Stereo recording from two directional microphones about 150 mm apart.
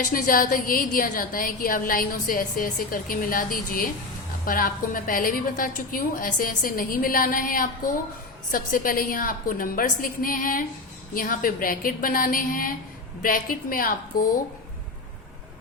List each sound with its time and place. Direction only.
0.0 s a woman's voice: 70° left (ahead or behind)